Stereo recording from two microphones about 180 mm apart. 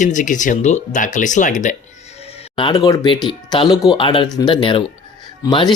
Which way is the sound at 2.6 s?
25° left (ahead or behind).